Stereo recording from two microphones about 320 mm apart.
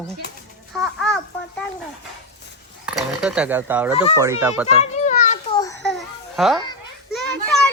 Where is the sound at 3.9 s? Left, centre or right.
Centre.